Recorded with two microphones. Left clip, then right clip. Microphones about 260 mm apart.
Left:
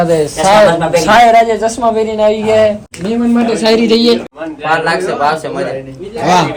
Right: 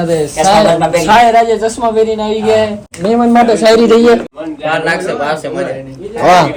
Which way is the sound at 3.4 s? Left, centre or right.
Centre.